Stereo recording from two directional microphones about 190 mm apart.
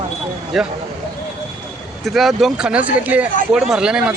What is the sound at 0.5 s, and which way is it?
Speech, centre (ahead or behind).